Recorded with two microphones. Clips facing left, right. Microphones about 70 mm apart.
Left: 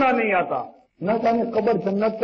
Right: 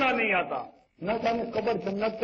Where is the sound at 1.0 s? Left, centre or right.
Left.